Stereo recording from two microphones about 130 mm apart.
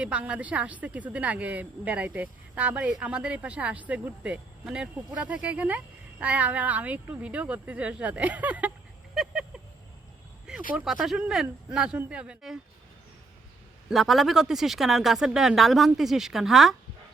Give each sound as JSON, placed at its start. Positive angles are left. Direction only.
{"t": 0.0, "sound": "a woman's voice", "side_deg": -10}
{"t": 9.1, "sound": "a sound", "side_deg": -5}
{"t": 10.7, "sound": "a woman's voice", "side_deg": -5}
{"t": 13.9, "sound": "speech", "side_deg": 0}